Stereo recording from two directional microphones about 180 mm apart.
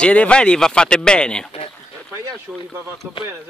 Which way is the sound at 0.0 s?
5° left (ahead or behind).